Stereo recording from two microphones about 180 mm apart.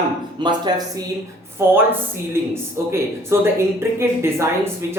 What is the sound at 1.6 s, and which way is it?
Speech, 15° right (ahead or behind).